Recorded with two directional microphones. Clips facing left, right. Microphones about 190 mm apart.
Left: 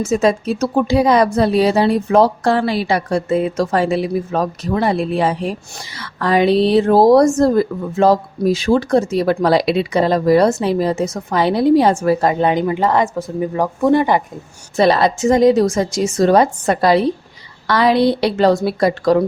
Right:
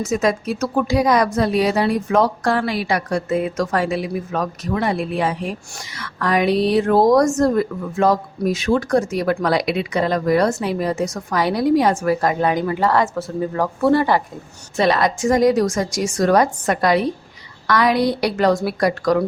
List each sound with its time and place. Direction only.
0.0 s a woman's voice: 25° left (ahead or behind)
14.8 s a woman's voice: 30° left (ahead or behind)